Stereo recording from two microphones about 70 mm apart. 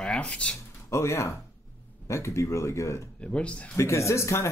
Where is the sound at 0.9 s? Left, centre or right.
Left.